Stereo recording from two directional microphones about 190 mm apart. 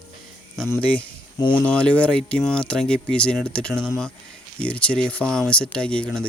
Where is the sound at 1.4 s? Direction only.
25° left (ahead or behind).